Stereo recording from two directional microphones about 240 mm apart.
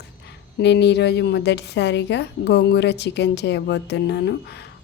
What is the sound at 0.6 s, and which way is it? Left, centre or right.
A woman's voice, left.